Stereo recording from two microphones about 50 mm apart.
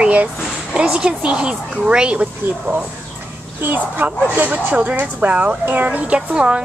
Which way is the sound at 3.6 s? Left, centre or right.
Right.